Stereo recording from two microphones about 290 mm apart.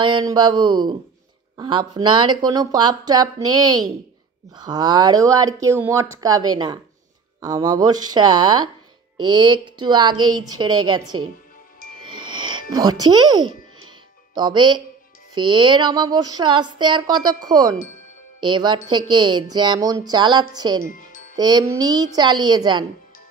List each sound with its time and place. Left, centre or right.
0.0 s a woman's voice: centre
4.6 s a woman's voice: centre
11.1 s speech: right
12.0 s music: centre
12.7 s a woman's voice: centre